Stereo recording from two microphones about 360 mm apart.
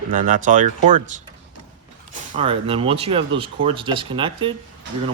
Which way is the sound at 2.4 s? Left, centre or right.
Centre.